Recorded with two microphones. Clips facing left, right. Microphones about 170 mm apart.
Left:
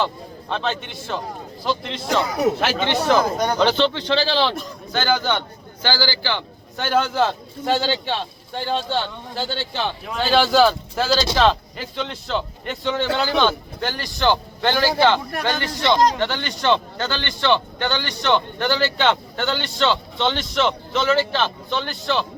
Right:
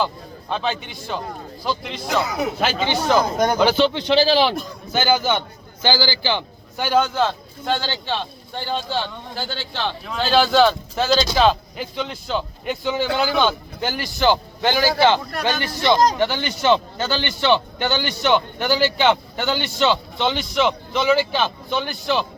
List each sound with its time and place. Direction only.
0.5 s a man's voice: centre (ahead or behind)
6.8 s a man's voice: centre (ahead or behind)